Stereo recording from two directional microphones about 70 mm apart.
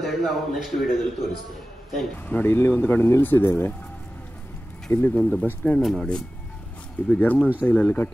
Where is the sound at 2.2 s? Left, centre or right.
Left.